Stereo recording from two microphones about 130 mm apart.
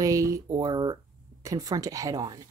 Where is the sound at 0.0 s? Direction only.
25° right (ahead or behind).